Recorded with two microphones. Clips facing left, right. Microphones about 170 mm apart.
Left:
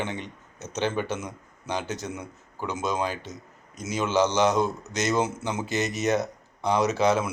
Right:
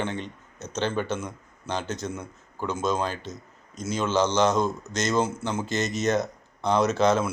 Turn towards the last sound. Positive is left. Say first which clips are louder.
# right 1 dB
turn(degrees=15)  # may be behind; listen again after turning